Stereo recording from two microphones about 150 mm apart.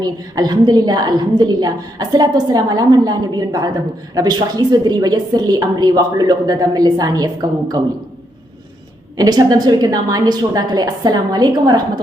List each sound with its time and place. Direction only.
0.0 s a woman's voice: 25° right (ahead or behind)
9.1 s a woman's voice: 25° right (ahead or behind)